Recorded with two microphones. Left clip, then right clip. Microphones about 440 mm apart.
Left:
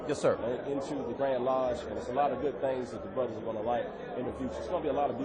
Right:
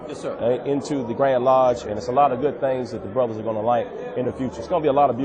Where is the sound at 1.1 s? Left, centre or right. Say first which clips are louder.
Right 13 dB; right.